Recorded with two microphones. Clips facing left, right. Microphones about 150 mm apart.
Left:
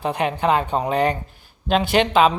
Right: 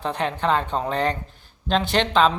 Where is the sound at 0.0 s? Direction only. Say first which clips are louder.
Left 3 dB; 10° left (ahead or behind).